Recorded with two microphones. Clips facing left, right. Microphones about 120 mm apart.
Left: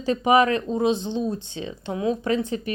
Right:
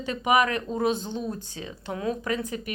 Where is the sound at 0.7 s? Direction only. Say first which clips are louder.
Left 4 dB; 20° left (ahead or behind).